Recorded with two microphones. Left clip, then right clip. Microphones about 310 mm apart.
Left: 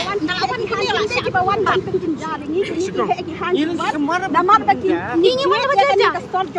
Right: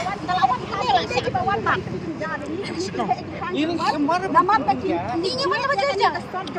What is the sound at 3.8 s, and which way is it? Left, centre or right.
Speech, centre.